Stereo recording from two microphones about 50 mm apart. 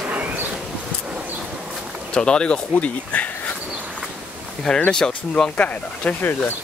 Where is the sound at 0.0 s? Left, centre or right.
Right.